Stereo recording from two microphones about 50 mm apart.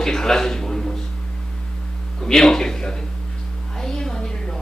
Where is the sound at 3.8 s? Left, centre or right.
Centre.